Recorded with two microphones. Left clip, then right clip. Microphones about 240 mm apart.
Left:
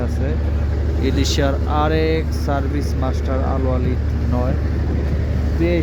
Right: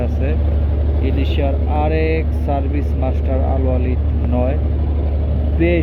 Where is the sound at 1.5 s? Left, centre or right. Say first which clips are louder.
Right 2 dB; left.